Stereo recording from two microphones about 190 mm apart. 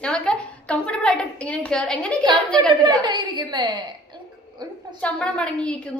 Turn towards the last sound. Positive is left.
turn(degrees=5)  # may be behind; listen again after turning